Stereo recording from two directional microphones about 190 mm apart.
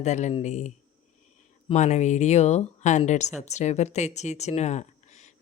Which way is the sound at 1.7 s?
35° left (ahead or behind).